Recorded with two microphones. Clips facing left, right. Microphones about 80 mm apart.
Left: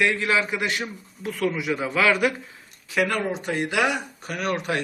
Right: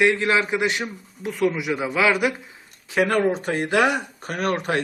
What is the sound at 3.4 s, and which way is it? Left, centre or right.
Speech, right.